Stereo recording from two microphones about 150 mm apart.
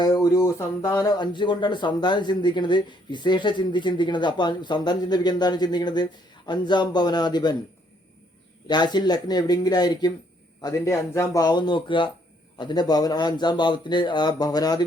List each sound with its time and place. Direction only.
0.0 s speech: 25° left (ahead or behind)
8.6 s speech: 30° left (ahead or behind)